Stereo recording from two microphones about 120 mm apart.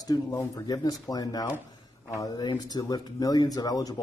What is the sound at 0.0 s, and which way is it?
Speech, 25° left (ahead or behind).